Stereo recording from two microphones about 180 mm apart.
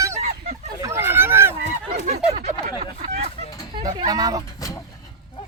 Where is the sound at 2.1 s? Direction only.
40° right (ahead or behind).